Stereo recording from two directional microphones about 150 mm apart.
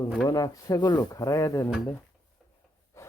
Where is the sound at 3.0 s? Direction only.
20° left (ahead or behind).